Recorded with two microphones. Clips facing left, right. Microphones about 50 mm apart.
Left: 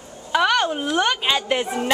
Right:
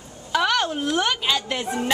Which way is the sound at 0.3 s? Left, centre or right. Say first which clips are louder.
Left 3 dB; centre.